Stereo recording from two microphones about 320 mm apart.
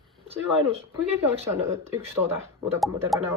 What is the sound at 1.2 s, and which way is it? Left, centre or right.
Speech, centre.